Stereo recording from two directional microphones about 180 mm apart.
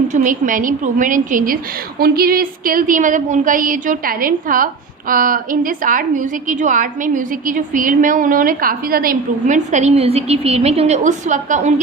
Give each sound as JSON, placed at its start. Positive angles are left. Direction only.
{"t": 0.1, "sound": "a woman's voice", "side_deg": -45}